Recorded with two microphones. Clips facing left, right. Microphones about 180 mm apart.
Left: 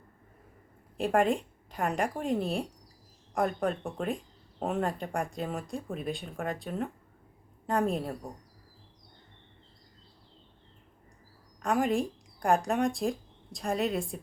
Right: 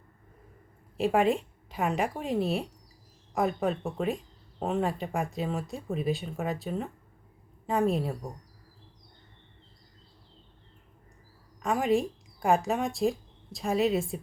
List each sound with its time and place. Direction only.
0.9 s speech: centre (ahead or behind)
11.6 s speech: centre (ahead or behind)